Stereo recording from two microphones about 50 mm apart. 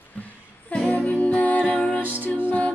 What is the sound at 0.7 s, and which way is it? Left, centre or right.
Music, left.